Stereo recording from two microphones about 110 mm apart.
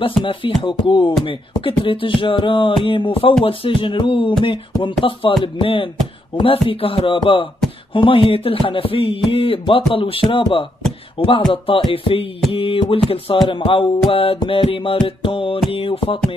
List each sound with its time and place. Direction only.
0.2 s beatboxing: 50° left (ahead or behind)
6.3 s speech: 55° left (ahead or behind)
6.7 s beatboxing: 55° left (ahead or behind)
7.9 s speech: 50° left (ahead or behind)
11.5 s beatboxing: 50° left (ahead or behind)
11.9 s speech: 55° left (ahead or behind)
13.3 s beatboxing: 50° left (ahead or behind)
13.7 s speech: 50° left (ahead or behind)